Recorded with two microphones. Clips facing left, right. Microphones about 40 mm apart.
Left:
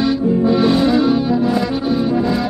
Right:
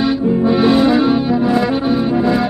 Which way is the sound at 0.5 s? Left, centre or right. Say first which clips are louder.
Right 3 dB; right.